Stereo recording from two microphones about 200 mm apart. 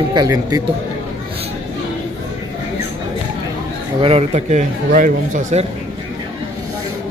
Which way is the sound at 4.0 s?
30° right (ahead or behind).